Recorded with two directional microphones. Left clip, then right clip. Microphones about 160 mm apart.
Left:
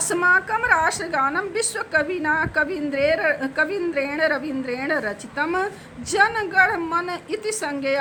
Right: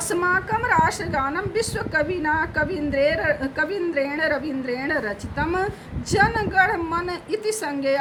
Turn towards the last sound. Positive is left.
turn(degrees=30)  # may be behind; listen again after turning